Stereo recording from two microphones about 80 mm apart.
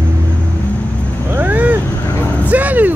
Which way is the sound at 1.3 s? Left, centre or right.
Right.